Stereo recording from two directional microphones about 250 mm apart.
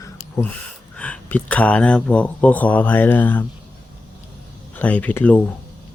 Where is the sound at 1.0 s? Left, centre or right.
Centre.